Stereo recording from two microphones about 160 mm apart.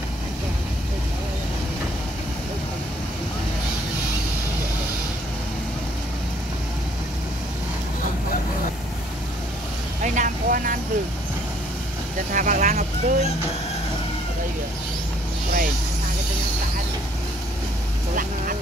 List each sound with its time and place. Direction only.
10.0 s vehicle: 50° right (ahead or behind)
12.4 s speech: 55° right (ahead or behind)